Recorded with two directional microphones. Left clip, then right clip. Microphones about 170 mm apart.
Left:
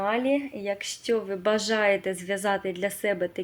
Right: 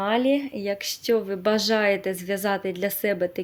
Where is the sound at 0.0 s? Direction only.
35° right (ahead or behind).